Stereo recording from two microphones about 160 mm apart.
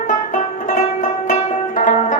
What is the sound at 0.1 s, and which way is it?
Music, 50° left (ahead or behind).